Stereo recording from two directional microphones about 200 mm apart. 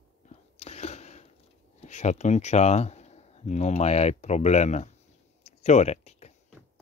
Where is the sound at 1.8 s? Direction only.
35° left (ahead or behind).